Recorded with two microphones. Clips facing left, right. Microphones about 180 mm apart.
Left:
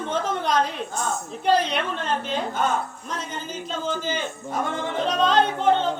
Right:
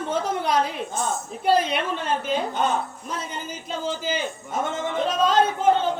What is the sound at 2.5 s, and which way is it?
Speech, 20° right (ahead or behind).